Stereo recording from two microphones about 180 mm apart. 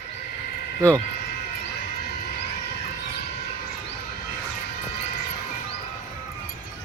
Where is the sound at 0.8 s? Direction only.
15° right (ahead or behind).